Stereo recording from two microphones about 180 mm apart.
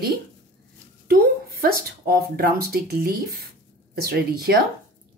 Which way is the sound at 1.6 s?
55° right (ahead or behind).